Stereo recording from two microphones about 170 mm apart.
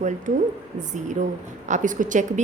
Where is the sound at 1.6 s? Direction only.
45° right (ahead or behind).